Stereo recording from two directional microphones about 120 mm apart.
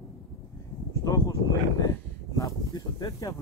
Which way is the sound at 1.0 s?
30° left (ahead or behind).